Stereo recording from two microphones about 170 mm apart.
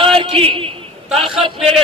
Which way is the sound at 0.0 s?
35° right (ahead or behind).